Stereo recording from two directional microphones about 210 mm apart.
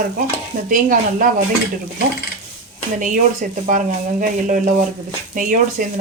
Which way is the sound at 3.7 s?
40° right (ahead or behind).